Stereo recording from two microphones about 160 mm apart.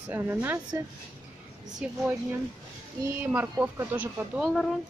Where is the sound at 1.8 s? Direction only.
5° right (ahead or behind).